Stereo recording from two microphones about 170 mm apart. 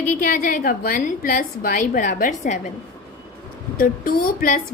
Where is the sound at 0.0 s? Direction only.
50° left (ahead or behind).